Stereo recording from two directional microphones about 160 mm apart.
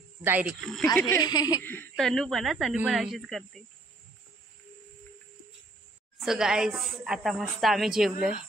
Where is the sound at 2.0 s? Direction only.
Centre (ahead or behind).